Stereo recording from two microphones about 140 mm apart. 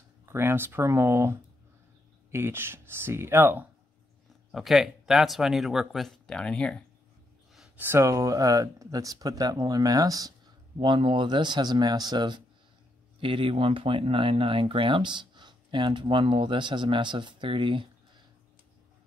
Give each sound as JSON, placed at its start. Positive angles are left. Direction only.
{"t": 0.3, "sound": "speech", "side_deg": -15}
{"t": 2.3, "sound": "speech", "side_deg": -15}
{"t": 4.5, "sound": "speech", "side_deg": 0}
{"t": 7.5, "sound": "a sound", "side_deg": -5}
{"t": 7.8, "sound": "speech", "side_deg": -20}
{"t": 10.8, "sound": "speech", "side_deg": -35}